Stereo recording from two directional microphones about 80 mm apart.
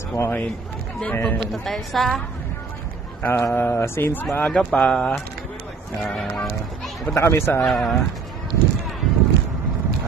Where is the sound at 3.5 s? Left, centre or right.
Left.